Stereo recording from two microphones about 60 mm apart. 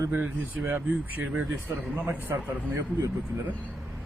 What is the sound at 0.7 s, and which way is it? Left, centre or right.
A man's voice, right.